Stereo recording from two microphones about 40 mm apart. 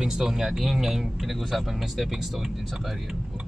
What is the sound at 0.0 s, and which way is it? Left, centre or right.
Speech, centre.